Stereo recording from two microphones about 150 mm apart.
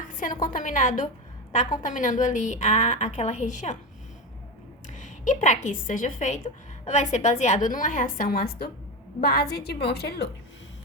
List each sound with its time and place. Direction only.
0.0 s a sound: 60° left (ahead or behind)
0.4 s a woman's voice: 65° left (ahead or behind)
4.9 s a woman's voice: 55° left (ahead or behind); by 10.2 s 90° left